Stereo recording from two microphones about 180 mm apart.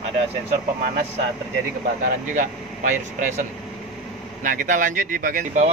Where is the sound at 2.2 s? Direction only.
45° right (ahead or behind).